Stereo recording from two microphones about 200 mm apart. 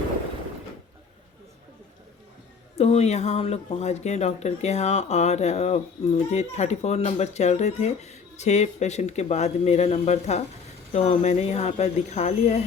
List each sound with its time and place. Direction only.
2.7 s speech: 30° left (ahead or behind)